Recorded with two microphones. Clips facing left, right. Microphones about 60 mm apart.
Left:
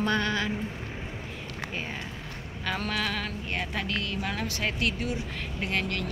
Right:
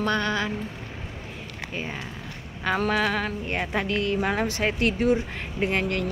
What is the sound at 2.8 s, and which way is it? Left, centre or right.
A woman's voice, centre.